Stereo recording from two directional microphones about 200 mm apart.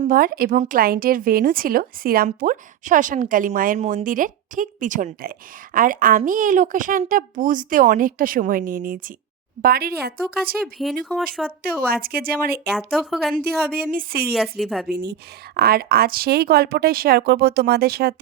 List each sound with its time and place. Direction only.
0.0 s speech: 45° right (ahead or behind)
11.1 s speech: centre (ahead or behind)
11.6 s speech: 50° right (ahead or behind)
12.7 s speech: centre (ahead or behind)
13.3 s speech: 50° right (ahead or behind)
14.6 s speech: centre (ahead or behind)
14.8 s speech: 50° right (ahead or behind)